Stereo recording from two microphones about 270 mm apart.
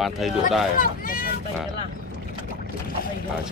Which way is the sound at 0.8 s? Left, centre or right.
Left.